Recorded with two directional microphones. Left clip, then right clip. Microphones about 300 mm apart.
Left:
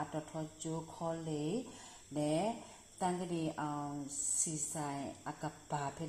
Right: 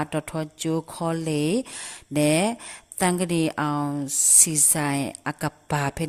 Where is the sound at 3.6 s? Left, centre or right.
Right.